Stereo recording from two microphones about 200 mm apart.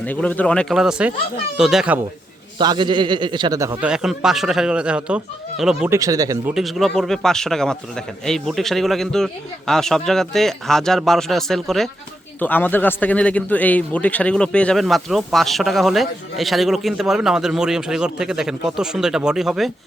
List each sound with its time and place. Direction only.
0.0 s a man's voice: 5° left (ahead or behind)
2.6 s a man's voice: 20° right (ahead or behind); by 5.9 s 5° right (ahead or behind)
5.9 s speech: 15° right (ahead or behind)
6.5 s a man's voice: centre (ahead or behind)